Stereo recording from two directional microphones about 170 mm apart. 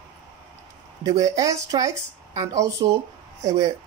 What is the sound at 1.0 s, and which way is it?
Speech, 20° right (ahead or behind).